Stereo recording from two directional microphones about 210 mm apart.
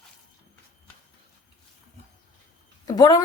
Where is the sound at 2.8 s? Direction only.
20° left (ahead or behind).